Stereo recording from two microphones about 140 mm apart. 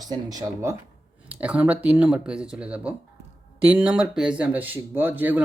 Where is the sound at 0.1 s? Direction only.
25° right (ahead or behind).